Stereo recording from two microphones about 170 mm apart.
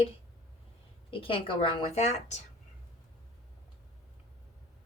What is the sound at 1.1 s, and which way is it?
A woman's voice, 30° left (ahead or behind).